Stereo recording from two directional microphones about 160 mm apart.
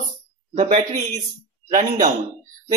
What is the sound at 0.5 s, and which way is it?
Speech, 50° right (ahead or behind).